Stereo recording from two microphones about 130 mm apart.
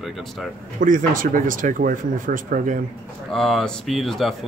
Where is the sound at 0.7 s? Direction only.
90° right.